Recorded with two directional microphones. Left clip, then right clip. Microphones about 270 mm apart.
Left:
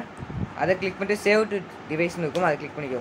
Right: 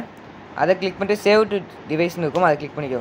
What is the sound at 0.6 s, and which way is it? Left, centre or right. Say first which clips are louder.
Speech: right 5 dB; centre.